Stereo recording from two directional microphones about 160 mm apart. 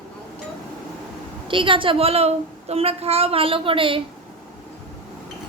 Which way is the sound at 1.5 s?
30° right (ahead or behind).